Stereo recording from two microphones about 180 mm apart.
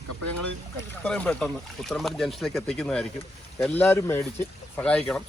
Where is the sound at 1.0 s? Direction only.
5° left (ahead or behind).